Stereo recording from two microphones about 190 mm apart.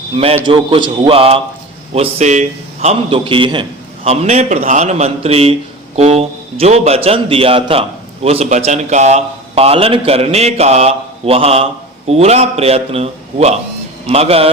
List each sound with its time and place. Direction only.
0.1 s a man's voice: 30° right (ahead or behind)